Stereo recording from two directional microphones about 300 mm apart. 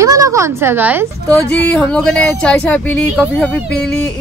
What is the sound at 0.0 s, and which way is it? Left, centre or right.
A woman's voice, centre.